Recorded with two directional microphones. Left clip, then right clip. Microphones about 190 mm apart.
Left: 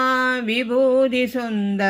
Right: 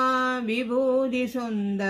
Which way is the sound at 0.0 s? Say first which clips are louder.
Left 4 dB; 15° left (ahead or behind).